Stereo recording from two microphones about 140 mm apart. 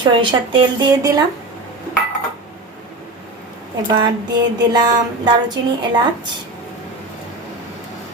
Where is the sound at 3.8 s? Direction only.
30° right (ahead or behind).